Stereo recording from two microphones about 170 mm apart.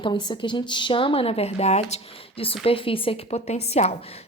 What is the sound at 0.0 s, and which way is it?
A woman's voice, 25° left (ahead or behind).